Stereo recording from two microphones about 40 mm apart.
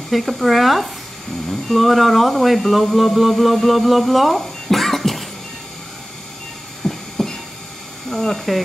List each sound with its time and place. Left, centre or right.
0.1 s speech: centre
6.8 s a sound: centre
8.1 s speech: centre